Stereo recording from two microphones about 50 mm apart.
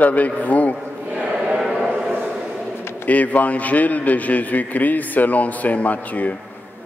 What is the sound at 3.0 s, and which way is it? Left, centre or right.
A man's voice, left.